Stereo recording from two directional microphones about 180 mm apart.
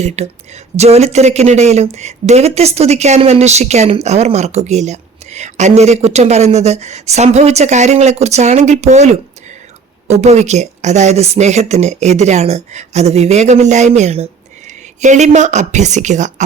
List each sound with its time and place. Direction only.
0.2 s speech: 35° right (ahead or behind)